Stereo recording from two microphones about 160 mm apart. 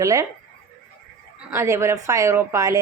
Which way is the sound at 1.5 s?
15° right (ahead or behind).